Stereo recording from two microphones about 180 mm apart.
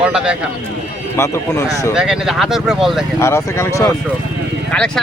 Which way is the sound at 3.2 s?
15° left (ahead or behind).